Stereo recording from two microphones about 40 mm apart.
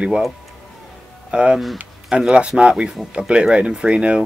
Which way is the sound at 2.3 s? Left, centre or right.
Right.